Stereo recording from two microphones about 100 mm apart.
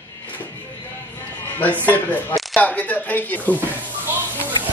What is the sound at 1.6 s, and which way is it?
Speech, 15° left (ahead or behind).